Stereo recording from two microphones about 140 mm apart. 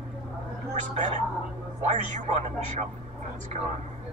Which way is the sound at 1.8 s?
60° right (ahead or behind).